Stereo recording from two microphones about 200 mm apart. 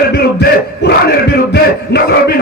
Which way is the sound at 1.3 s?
50° left (ahead or behind).